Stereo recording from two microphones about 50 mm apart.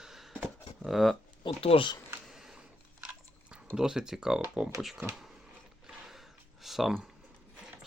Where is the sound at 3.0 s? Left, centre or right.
Right.